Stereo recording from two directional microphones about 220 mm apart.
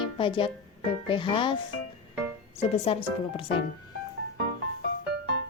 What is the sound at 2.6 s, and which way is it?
Speech, 25° left (ahead or behind).